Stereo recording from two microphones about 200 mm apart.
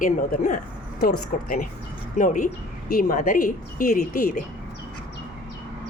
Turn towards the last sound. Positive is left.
turn(degrees=40)  # may be behind; listen again after turning